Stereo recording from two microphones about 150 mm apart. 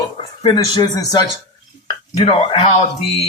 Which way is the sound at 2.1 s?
35° left (ahead or behind).